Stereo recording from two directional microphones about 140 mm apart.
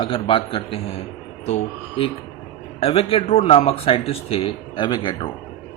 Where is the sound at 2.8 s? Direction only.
40° left (ahead or behind).